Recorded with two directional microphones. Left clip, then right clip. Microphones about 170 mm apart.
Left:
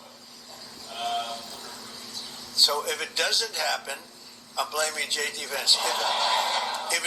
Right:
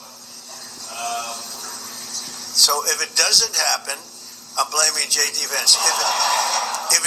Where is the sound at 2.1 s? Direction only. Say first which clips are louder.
Right 6 dB; 45° right (ahead or behind).